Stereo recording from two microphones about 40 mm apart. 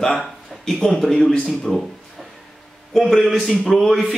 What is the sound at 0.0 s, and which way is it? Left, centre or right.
A man's voice, centre.